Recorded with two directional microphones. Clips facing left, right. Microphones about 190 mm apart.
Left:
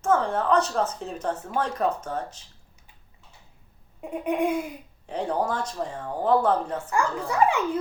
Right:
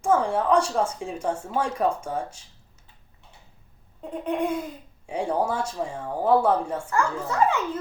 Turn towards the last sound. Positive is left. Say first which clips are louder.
# left 1 dB
turn(degrees=15)  # may be behind; listen again after turning